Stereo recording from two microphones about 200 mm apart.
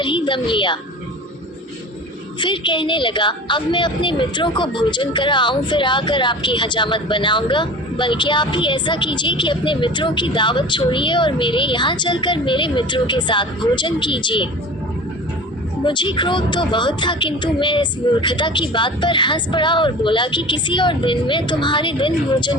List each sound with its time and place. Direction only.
0.0 s a woman's voice: 25° left (ahead or behind)
2.4 s a woman's voice: 25° left (ahead or behind)
15.8 s a woman's voice: 25° left (ahead or behind)